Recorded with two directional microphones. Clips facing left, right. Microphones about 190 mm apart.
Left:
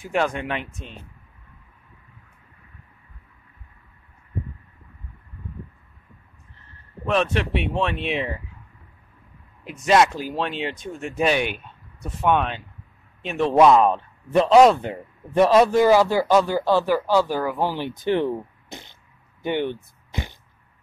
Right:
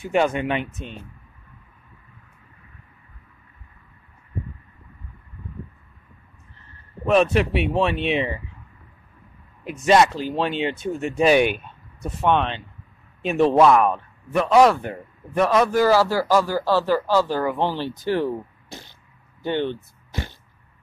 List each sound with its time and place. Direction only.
0.0 s speech: centre (ahead or behind)
7.1 s speech: 5° right (ahead or behind)
9.8 s speech: centre (ahead or behind)
13.2 s speech: 5° right (ahead or behind)
13.6 s speech: 20° left (ahead or behind)